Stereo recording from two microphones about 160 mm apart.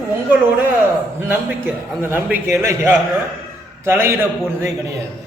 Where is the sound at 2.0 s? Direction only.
15° right (ahead or behind).